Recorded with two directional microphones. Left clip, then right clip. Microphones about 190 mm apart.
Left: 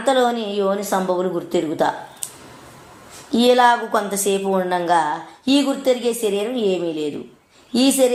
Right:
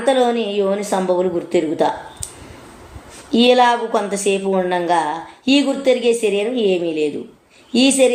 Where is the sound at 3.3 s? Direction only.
25° left (ahead or behind).